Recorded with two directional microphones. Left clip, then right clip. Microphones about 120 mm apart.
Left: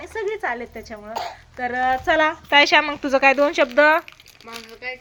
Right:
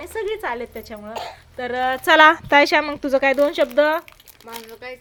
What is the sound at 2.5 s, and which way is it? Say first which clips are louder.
Speech: even; 60° right (ahead or behind).